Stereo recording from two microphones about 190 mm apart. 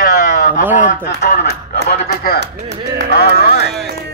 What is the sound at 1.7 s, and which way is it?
Speech, 55° left (ahead or behind).